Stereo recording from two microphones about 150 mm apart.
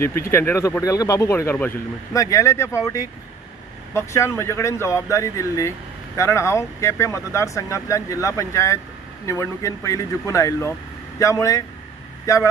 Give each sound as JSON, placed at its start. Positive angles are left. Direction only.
{"t": 0.0, "sound": "speech", "side_deg": 15}